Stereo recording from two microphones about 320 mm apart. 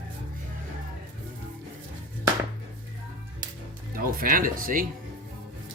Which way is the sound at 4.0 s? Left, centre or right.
Right.